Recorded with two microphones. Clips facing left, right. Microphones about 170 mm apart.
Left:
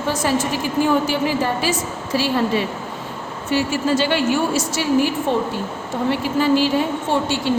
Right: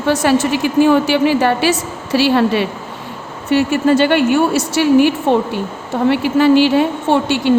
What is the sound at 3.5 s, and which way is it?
A woman's voice, 60° right (ahead or behind).